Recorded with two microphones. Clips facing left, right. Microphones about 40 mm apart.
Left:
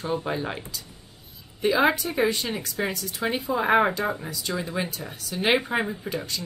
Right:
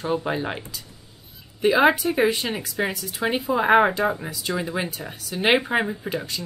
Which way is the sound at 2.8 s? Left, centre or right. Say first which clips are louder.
Right 3 dB; centre.